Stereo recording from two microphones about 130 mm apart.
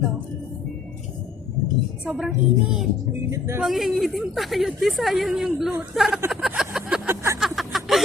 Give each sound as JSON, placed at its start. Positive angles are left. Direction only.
{"t": 2.0, "sound": "a woman's voice", "side_deg": -5}
{"t": 3.2, "sound": "speech", "side_deg": -20}
{"t": 3.6, "sound": "a woman's voice", "side_deg": 0}
{"t": 6.3, "sound": "vehicle", "side_deg": -5}
{"t": 7.3, "sound": "a sound", "side_deg": 0}